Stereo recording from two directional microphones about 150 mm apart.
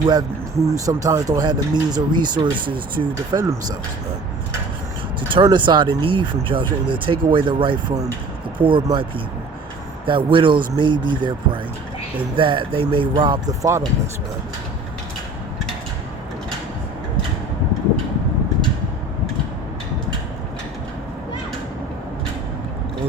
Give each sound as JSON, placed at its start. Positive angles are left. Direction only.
{"t": 0.0, "sound": "speech", "side_deg": -25}
{"t": 5.3, "sound": "speech", "side_deg": -30}